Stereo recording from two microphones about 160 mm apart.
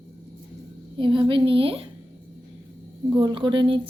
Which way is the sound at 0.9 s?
30° right (ahead or behind).